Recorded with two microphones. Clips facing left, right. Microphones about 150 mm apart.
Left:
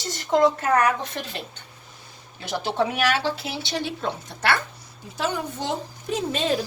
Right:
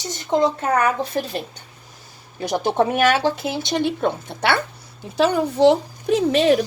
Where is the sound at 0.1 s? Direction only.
20° right (ahead or behind).